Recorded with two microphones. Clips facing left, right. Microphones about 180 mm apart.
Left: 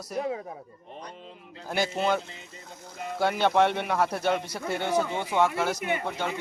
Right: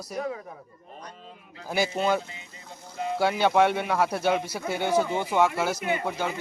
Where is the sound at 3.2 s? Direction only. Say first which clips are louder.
Right 1 dB; 5° right (ahead or behind).